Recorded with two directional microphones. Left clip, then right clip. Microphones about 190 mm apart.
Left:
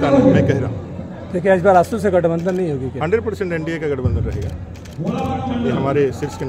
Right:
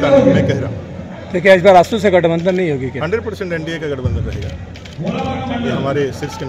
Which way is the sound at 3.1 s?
35° left (ahead or behind).